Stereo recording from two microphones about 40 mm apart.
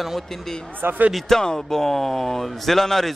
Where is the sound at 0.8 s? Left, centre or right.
Right.